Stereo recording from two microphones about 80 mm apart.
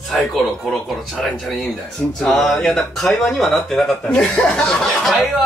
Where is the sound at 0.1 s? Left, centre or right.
Centre.